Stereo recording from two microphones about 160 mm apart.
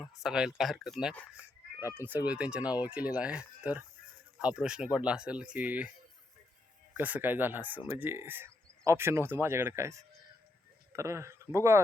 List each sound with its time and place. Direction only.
0.0 s speech: centre (ahead or behind)
1.8 s speech: 15° right (ahead or behind)
6.9 s speech: 10° right (ahead or behind)